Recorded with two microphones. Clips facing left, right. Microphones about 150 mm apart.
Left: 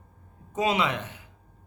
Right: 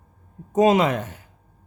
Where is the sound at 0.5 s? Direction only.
45° right (ahead or behind).